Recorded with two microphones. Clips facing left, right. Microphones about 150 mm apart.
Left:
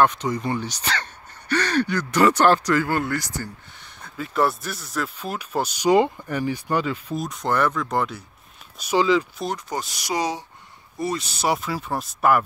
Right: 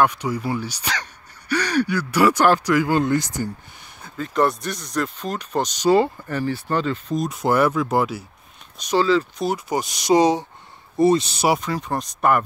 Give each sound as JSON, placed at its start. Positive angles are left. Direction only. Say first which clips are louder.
{"t": 0.0, "sound": "speech", "louder": "even", "side_deg": -10}
{"t": 4.2, "sound": "speech", "louder": "right 2 dB", "side_deg": 5}
{"t": 7.2, "sound": "speech", "louder": "right 4 dB", "side_deg": -10}
{"t": 8.7, "sound": "speech", "louder": "right 1 dB", "side_deg": 10}
{"t": 9.4, "sound": "speech", "louder": "right 5 dB", "side_deg": -10}
{"t": 11.4, "sound": "speech", "louder": "right 3 dB", "side_deg": 0}